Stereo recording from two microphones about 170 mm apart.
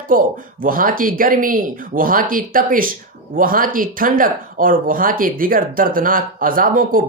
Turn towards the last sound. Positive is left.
turn(degrees=-55)  # may be behind; listen again after turning